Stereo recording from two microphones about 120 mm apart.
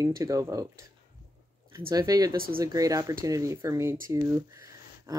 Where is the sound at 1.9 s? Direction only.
30° right (ahead or behind).